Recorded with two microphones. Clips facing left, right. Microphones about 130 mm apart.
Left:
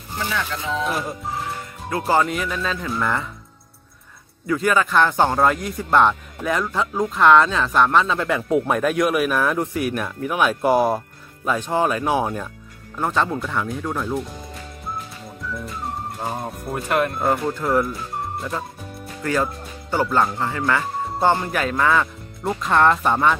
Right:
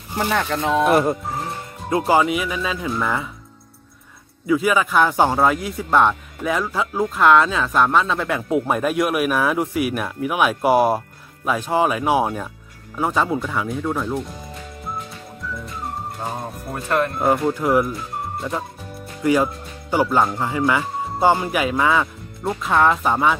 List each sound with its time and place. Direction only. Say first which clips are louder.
0.2 s speech: right 6 dB; 55° right (ahead or behind)
1.9 s speech: right 3 dB; 15° right (ahead or behind)
4.5 s a man's voice: right 1 dB; 5° right (ahead or behind)
14.9 s music: even; centre (ahead or behind)
17.4 s speech: right 2 dB; 10° right (ahead or behind)
17.9 s music: even; centre (ahead or behind)
19.2 s speech: right 5 dB; 10° right (ahead or behind)